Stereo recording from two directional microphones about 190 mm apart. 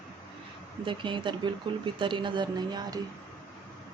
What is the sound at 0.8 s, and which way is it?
Speech, 25° right (ahead or behind).